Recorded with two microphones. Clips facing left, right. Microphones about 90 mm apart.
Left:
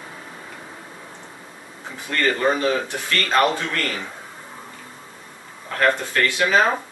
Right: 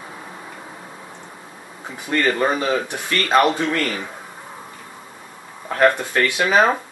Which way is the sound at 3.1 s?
15° right (ahead or behind).